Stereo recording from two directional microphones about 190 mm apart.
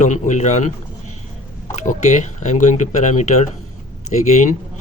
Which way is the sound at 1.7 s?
40° left (ahead or behind).